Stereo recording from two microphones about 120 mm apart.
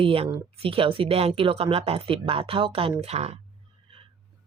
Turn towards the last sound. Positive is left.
turn(degrees=-50)  # may be behind; listen again after turning